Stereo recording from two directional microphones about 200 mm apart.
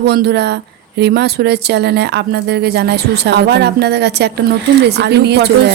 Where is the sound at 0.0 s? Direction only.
55° right (ahead or behind).